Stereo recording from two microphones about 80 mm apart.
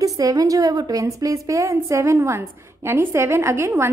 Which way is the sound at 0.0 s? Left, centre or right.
Right.